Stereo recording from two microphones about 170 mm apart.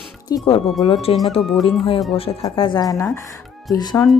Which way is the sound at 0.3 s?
30° left (ahead or behind).